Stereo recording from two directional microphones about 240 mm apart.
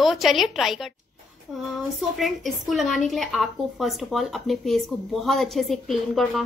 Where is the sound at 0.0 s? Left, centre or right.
Centre.